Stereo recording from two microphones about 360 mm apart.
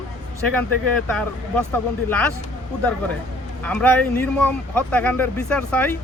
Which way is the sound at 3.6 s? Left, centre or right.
Centre.